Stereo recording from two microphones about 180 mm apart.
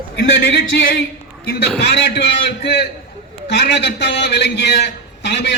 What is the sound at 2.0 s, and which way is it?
Speech, 70° left (ahead or behind).